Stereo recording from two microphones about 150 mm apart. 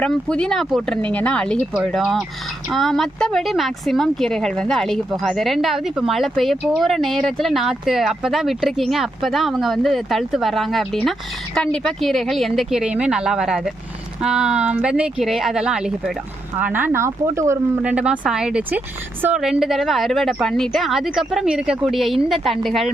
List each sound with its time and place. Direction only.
0.0 s speech: 5° left (ahead or behind); by 17.6 s 20° right (ahead or behind)
17.8 s speech: 10° right (ahead or behind)